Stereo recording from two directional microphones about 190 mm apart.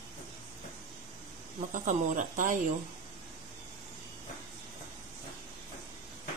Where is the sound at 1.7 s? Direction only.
40° right (ahead or behind).